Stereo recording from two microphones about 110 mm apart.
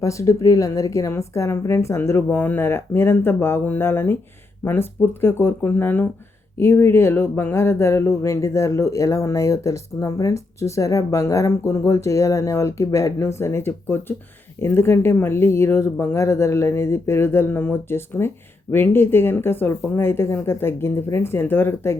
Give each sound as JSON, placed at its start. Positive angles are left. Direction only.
{"t": 0.0, "sound": "speech", "side_deg": 30}